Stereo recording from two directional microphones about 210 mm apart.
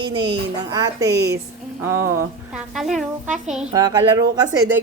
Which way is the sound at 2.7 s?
Centre (ahead or behind).